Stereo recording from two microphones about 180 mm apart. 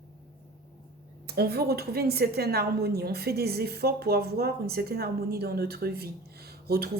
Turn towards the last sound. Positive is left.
turn(degrees=-60)  # may be behind; listen again after turning